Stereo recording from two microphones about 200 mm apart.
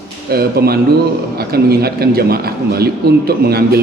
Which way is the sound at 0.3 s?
50° right (ahead or behind).